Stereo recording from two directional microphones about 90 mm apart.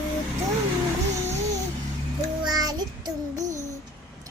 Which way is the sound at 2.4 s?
50° right (ahead or behind).